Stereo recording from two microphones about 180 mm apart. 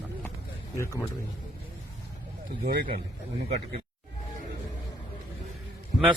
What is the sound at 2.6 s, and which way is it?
Speech, 55° right (ahead or behind).